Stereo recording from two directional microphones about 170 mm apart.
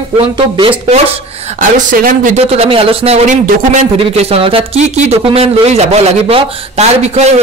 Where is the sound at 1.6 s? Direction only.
50° right (ahead or behind).